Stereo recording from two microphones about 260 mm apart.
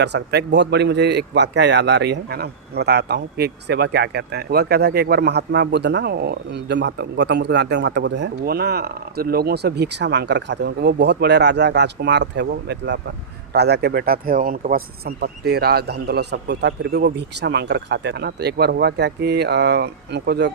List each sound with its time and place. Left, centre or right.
0.0 s a man's voice: right